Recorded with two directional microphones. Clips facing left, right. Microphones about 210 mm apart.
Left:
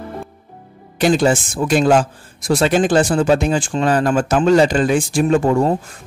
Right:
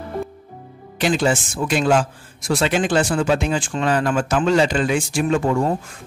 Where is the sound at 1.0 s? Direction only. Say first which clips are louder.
Left 4 dB; 40° left (ahead or behind).